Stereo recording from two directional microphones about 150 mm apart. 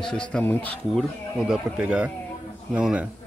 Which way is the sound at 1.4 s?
5° right (ahead or behind).